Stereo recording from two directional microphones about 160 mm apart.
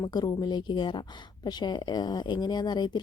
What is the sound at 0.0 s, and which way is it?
A woman's voice, 25° left (ahead or behind).